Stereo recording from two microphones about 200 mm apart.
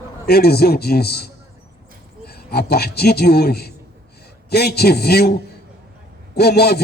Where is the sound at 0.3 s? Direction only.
50° left (ahead or behind).